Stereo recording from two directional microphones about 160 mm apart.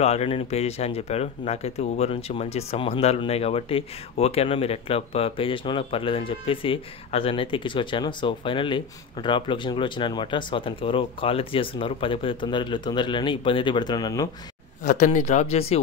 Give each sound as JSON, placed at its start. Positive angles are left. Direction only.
{"t": 0.0, "sound": "speech", "side_deg": 40}
{"t": 14.8, "sound": "speech", "side_deg": 55}